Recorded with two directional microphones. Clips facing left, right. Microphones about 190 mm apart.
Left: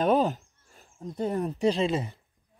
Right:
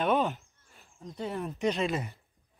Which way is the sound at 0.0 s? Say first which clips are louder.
Left 4 dB; 35° left (ahead or behind).